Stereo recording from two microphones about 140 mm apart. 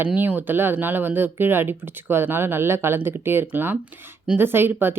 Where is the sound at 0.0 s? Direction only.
10° right (ahead or behind).